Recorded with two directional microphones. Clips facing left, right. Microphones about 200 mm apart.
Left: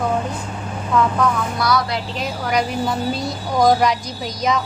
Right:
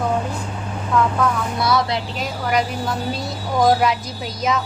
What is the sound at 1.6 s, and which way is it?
Speech, 25° right (ahead or behind).